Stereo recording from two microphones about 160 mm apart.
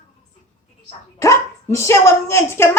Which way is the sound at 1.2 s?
20° left (ahead or behind).